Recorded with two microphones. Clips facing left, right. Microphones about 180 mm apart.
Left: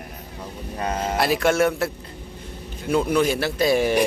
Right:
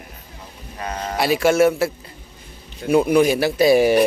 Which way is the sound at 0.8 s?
25° left (ahead or behind).